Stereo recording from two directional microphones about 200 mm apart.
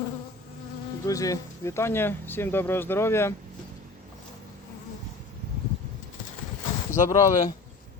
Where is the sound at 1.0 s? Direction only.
15° left (ahead or behind).